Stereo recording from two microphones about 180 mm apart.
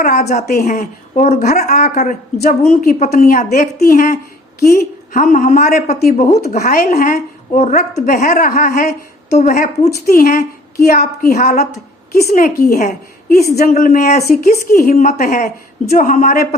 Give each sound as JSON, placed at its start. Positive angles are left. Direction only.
{"t": 0.0, "sound": "a woman's voice", "side_deg": 45}
{"t": 1.4, "sound": "a woman's voice", "side_deg": 55}